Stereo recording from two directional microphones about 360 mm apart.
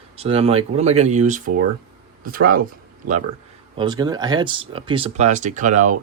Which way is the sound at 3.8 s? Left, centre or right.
Centre.